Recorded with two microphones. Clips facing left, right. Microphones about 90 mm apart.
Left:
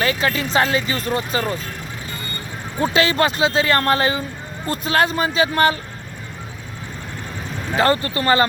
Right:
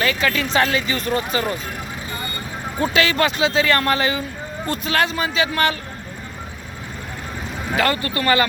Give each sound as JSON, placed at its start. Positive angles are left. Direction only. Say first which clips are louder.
{"t": 0.0, "sound": "speech", "louder": "even", "side_deg": 30}
{"t": 2.8, "sound": "speech", "louder": "left 1 dB", "side_deg": 30}
{"t": 7.8, "sound": "speech", "louder": "left 3 dB", "side_deg": 30}